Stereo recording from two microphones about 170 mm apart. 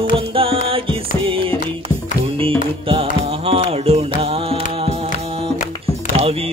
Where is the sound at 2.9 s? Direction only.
35° right (ahead or behind).